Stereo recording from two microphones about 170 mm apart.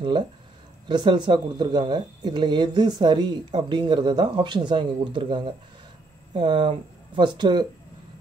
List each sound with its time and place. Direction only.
0.8 s speech: 25° right (ahead or behind)